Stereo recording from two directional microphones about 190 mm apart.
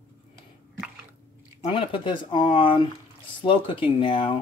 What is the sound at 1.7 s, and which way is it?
Speech, 25° left (ahead or behind).